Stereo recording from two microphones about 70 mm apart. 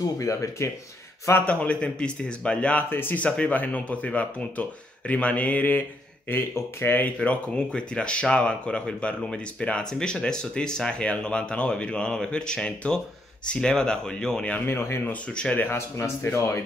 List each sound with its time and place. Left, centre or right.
0.2 s speech: left
1.4 s speech: centre
2.9 s speech: left
3.3 s speech: centre
7.2 s speech: centre
14.7 s speech: left
15.3 s speech: left
15.7 s speech: left